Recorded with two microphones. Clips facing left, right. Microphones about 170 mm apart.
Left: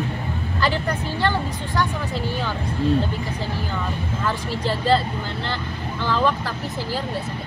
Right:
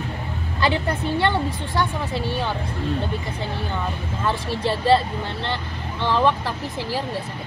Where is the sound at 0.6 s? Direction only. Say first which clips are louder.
Right 2 dB; 25° right (ahead or behind).